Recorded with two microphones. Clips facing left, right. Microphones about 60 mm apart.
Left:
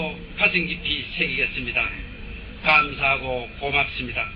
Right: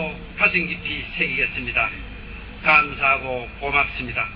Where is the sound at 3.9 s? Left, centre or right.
Right.